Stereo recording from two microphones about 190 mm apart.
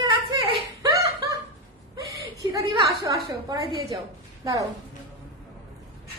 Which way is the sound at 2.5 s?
15° right (ahead or behind).